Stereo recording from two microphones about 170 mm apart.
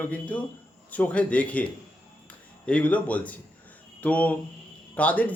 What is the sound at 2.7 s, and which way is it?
A man's voice, 10° left (ahead or behind).